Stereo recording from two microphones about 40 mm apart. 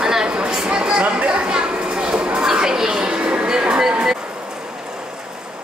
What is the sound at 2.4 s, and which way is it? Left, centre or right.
Music, centre.